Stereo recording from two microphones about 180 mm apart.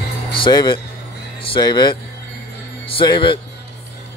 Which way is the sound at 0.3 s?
25° left (ahead or behind).